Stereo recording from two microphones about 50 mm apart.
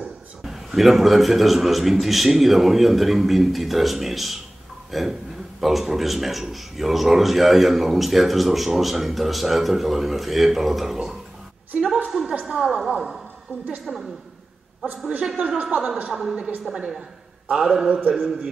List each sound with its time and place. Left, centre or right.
0.4 s speech: centre
11.7 s a woman's voice: centre
12.1 s a sound: centre
12.4 s a woman's voice: centre
15.3 s a woman's voice: centre